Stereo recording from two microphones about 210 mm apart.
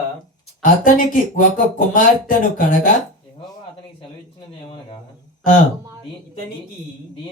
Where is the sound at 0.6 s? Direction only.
40° left (ahead or behind).